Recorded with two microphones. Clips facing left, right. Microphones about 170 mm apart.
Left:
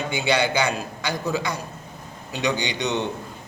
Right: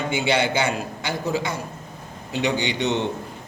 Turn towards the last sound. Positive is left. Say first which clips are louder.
# right 2 dB
turn(degrees=-25)  # may be behind; listen again after turning